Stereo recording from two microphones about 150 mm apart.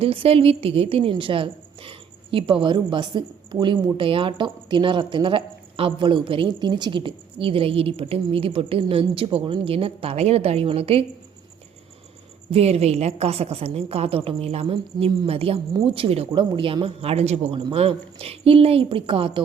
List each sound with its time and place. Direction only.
0.0 s speech: 40° right (ahead or behind)
12.5 s a woman's voice: 45° right (ahead or behind)